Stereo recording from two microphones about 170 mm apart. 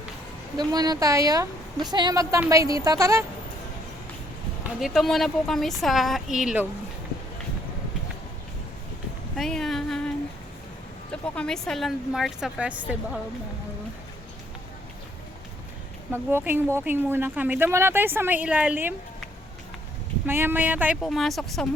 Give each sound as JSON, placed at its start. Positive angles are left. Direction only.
{"t": 0.5, "sound": "a woman's voice", "side_deg": -25}
{"t": 4.6, "sound": "speech", "side_deg": 0}
{"t": 9.3, "sound": "a sound", "side_deg": 5}
{"t": 11.1, "sound": "speech", "side_deg": 5}
{"t": 16.1, "sound": "speech", "side_deg": -15}
{"t": 20.2, "sound": "speech", "side_deg": -15}
{"t": 21.0, "sound": "speech", "side_deg": 0}